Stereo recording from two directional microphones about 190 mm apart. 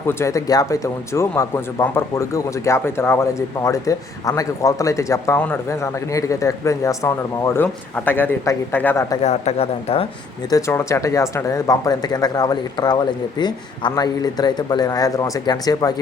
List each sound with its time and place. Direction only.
0.1 s speech: 15° left (ahead or behind)
9.2 s speech: 35° left (ahead or behind)
10.5 s a man's voice: 15° left (ahead or behind)